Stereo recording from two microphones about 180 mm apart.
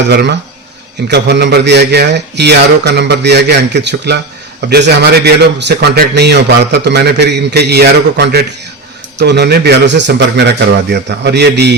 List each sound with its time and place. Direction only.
0.1 s a man's voice: 65° right (ahead or behind)